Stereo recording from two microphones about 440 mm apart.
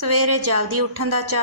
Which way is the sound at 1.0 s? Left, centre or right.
Right.